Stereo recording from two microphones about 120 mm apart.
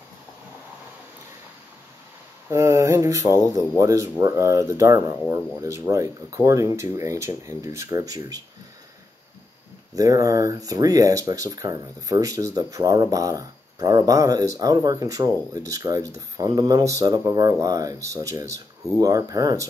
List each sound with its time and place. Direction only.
2.5 s speech: 25° right (ahead or behind)
9.9 s speech: 30° right (ahead or behind)